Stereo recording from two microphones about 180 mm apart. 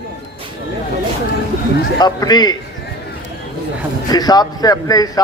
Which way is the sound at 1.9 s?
20° left (ahead or behind).